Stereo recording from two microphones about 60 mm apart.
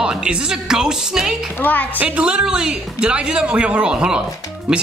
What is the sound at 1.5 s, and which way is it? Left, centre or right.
Speech, left.